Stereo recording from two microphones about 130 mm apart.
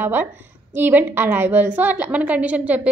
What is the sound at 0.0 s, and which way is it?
A woman's voice, 15° right (ahead or behind).